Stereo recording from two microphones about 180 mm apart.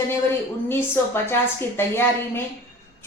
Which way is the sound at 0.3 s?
15° left (ahead or behind).